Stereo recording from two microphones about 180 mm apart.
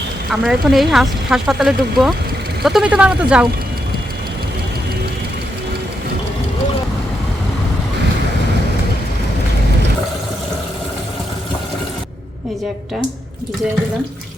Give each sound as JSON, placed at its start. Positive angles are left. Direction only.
{"t": 0.3, "sound": "speech", "side_deg": 0}